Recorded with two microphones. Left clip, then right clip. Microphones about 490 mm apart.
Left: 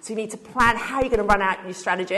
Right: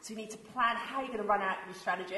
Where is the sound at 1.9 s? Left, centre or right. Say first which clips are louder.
Left 10 dB; left.